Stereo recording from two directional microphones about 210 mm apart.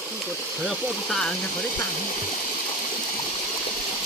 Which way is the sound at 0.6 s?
Centre (ahead or behind).